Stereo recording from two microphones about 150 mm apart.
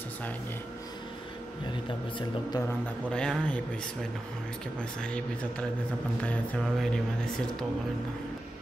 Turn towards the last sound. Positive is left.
turn(degrees=5)  # may be behind; listen again after turning